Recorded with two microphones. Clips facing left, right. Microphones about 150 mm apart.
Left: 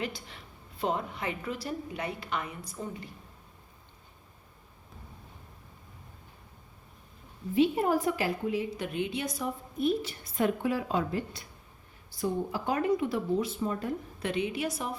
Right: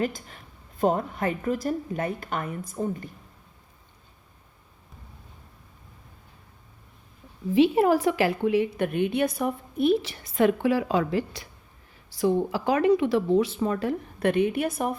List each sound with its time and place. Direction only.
0.0 s a woman's voice: 45° right (ahead or behind)
7.5 s a woman's voice: 90° right; by 14.9 s 55° right (ahead or behind)